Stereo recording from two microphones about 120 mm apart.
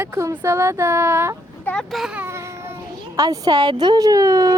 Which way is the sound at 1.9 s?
5° right (ahead or behind).